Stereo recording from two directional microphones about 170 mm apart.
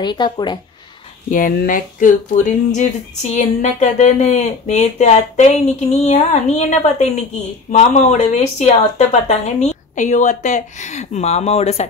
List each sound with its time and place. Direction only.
0.0 s speech: 25° left (ahead or behind)
1.3 s speech: 55° left (ahead or behind); by 11.9 s 40° left (ahead or behind)